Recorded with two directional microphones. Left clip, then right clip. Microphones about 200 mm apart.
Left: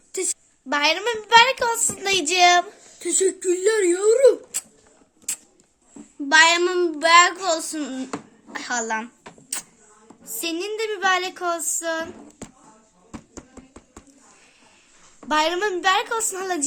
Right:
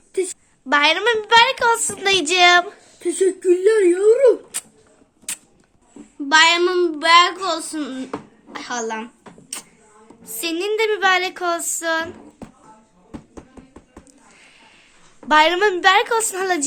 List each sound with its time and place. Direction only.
0.7 s a child's voice: centre (ahead or behind)
3.0 s speech: 45° left (ahead or behind)
4.5 s a sound: 5° right (ahead or behind)
6.2 s a child's voice: 20° left (ahead or behind)
9.5 s music: 30° left (ahead or behind)
10.2 s a woman's voice: 10° right (ahead or behind)
15.3 s a woman's voice: 5° right (ahead or behind)